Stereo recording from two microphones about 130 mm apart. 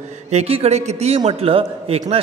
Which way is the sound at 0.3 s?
55° right (ahead or behind).